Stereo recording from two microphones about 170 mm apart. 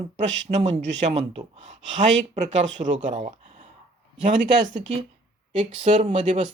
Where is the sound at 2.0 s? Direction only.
45° right (ahead or behind).